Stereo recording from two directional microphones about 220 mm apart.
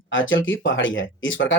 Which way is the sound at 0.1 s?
60° left (ahead or behind).